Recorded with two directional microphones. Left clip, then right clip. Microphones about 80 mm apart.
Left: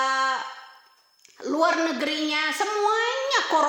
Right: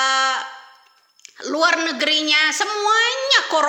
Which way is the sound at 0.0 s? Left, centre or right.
Left.